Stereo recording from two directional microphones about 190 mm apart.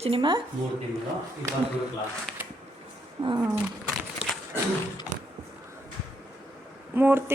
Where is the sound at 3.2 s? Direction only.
35° right (ahead or behind).